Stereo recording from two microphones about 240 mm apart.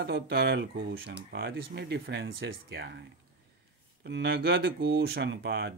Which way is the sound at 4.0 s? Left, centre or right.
Right.